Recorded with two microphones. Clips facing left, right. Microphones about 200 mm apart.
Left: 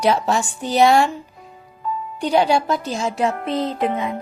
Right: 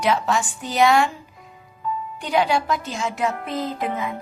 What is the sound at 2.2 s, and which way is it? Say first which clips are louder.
Speech: left 4 dB; 35° left (ahead or behind).